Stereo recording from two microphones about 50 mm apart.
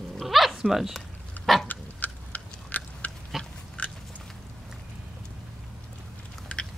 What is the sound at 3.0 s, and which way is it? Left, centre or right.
Dog, left.